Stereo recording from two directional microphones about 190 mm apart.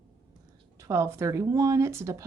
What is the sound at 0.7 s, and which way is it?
Speech, 15° right (ahead or behind).